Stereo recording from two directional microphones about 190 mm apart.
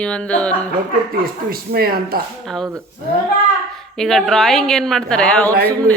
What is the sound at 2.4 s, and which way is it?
Speech, centre (ahead or behind).